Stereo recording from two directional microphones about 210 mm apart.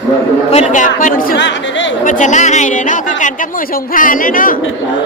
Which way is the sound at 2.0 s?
35° left (ahead or behind).